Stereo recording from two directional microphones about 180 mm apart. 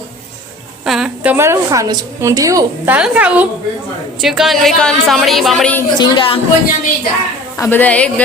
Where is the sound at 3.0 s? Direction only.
5° right (ahead or behind).